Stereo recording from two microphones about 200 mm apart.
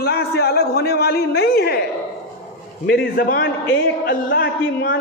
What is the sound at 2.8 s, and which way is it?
A man's voice, 50° left (ahead or behind).